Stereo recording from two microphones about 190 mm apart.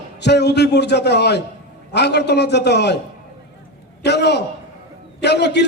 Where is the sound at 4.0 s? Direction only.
65° left (ahead or behind).